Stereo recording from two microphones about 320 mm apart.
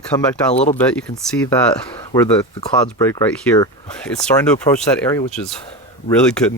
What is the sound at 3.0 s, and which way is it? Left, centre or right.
Speech, centre.